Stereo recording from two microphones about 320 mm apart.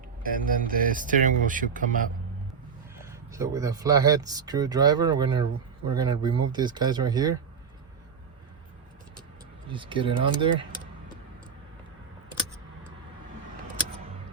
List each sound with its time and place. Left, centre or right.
0.2 s speech: right
2.9 s speech: centre
9.7 s speech: centre